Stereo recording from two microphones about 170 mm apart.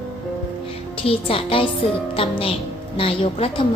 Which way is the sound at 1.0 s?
35° left (ahead or behind).